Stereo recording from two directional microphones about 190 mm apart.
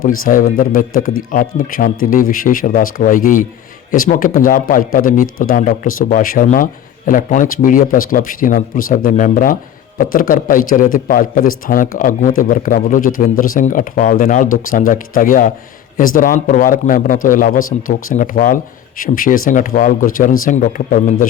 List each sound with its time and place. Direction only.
0.3 s speech: 50° left (ahead or behind)